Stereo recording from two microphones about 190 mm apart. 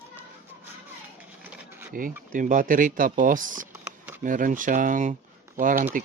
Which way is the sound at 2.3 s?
45° right (ahead or behind).